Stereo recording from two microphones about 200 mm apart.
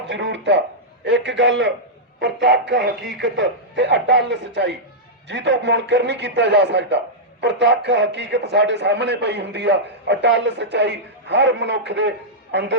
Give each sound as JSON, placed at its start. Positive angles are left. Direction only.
{"t": 0.1, "sound": "a man's voice", "side_deg": -65}